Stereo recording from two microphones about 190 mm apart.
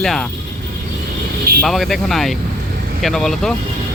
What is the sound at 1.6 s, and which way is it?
Speech, centre (ahead or behind).